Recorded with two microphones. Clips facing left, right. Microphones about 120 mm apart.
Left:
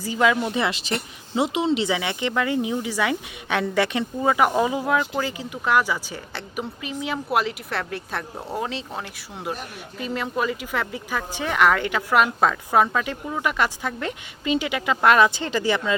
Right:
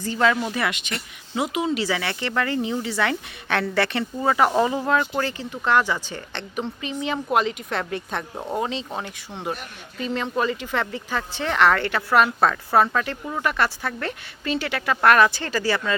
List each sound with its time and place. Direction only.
0.0 s speech: 15° left (ahead or behind)
0.5 s speech: 30° left (ahead or behind)